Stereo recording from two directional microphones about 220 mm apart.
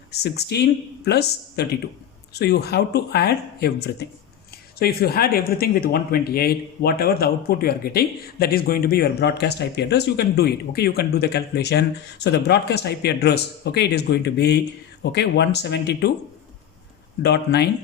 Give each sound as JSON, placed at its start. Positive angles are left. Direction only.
{"t": 0.1, "sound": "speech", "side_deg": 50}
{"t": 4.8, "sound": "speech", "side_deg": 45}
{"t": 17.2, "sound": "speech", "side_deg": 50}